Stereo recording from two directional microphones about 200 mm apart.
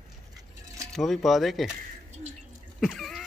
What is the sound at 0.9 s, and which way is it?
Speech, centre (ahead or behind).